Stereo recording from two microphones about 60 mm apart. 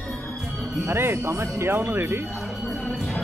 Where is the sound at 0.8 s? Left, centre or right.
Right.